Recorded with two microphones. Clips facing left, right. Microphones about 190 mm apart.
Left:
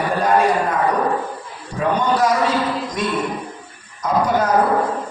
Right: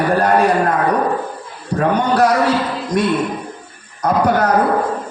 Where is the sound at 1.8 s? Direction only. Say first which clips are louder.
Right 3 dB; 65° right (ahead or behind).